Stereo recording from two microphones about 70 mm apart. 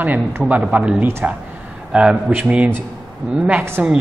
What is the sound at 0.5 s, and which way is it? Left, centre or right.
A man's voice, centre.